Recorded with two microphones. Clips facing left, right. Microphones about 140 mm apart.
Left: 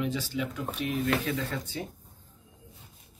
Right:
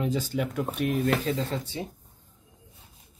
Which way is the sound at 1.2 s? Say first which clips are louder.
Right 3 dB; 30° right (ahead or behind).